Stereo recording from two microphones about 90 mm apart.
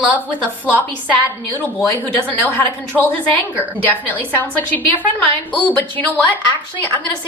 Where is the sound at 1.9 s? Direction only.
20° left (ahead or behind).